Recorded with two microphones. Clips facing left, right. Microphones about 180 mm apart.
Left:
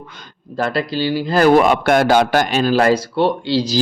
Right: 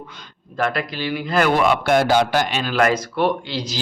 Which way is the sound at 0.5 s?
30° left (ahead or behind).